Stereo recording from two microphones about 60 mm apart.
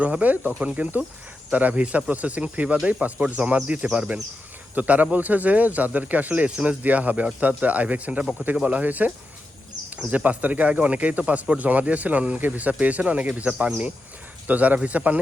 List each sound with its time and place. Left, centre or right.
0.0 s speech: right